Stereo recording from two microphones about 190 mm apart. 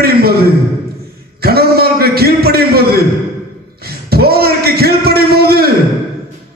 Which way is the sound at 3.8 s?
55° right (ahead or behind).